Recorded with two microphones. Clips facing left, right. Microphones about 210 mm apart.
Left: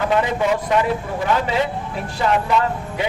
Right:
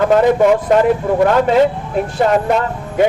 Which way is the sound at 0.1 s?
45° right (ahead or behind).